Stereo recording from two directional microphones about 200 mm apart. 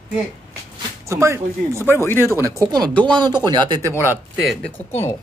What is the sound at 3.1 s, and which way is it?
Speech, 20° right (ahead or behind).